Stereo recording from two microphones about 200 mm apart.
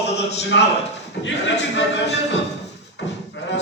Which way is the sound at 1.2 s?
60° left (ahead or behind).